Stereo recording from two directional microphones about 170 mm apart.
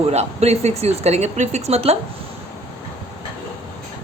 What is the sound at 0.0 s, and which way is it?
A woman's voice, 40° right (ahead or behind).